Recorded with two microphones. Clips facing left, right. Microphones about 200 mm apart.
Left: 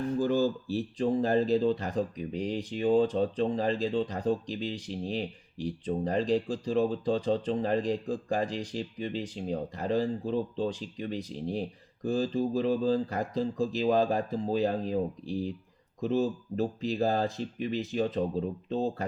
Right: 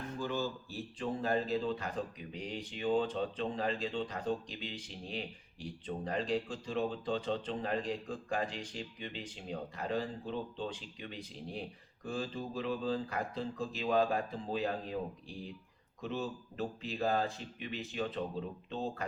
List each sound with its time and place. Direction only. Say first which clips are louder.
0.2 s speech: left 9 dB; 40° left (ahead or behind)